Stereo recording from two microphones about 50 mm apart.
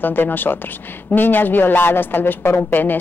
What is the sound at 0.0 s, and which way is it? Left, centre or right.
A woman's voice, left.